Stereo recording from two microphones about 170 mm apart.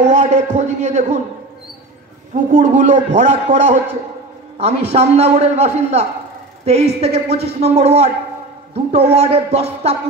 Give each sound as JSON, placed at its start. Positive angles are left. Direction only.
{"t": 0.1, "sound": "a man's voice", "side_deg": -45}
{"t": 2.3, "sound": "a man's voice", "side_deg": -45}